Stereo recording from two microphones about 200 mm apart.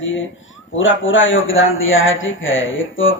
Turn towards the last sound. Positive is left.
turn(degrees=75)  # may be behind; listen again after turning